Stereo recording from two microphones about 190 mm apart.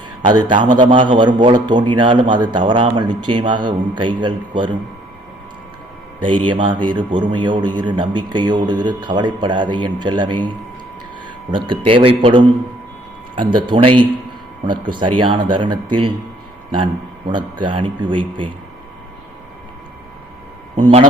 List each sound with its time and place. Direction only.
0.3 s a man's voice: 25° right (ahead or behind)
6.2 s a man's voice: 25° right (ahead or behind)
11.5 s a man's voice: 30° right (ahead or behind)